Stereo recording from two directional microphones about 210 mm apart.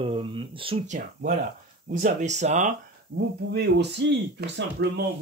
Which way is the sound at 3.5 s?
55° right (ahead or behind).